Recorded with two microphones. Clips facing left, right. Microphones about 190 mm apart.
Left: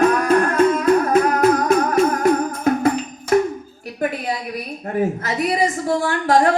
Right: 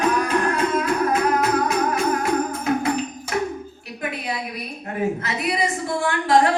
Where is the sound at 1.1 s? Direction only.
45° left (ahead or behind).